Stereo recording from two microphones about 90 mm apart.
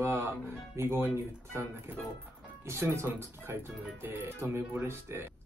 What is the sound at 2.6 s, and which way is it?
Speech, 30° right (ahead or behind).